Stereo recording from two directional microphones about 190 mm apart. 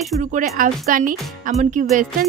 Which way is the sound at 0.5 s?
45° right (ahead or behind).